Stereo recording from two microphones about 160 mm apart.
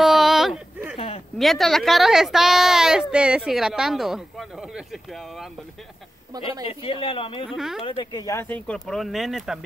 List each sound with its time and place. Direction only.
0.0 s a sound: centre (ahead or behind)
0.9 s a sound: 35° left (ahead or behind)
1.4 s speech: centre (ahead or behind)
6.3 s speech: 25° right (ahead or behind)
6.7 s speech: 35° left (ahead or behind)
7.4 s speech: centre (ahead or behind)
7.8 s speech: 25° left (ahead or behind); by 9.6 s centre (ahead or behind)